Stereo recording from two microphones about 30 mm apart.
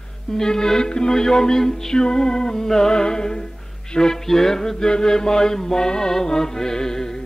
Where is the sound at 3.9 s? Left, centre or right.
Centre.